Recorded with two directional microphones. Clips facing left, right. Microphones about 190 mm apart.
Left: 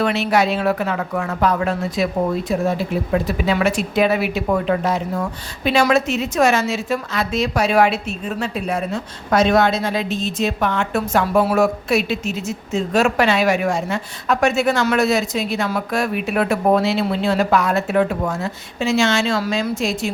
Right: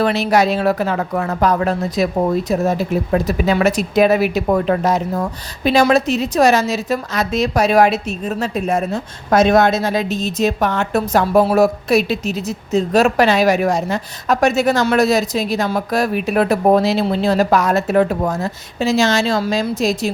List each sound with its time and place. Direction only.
0.0 s a woman's voice: 35° right (ahead or behind)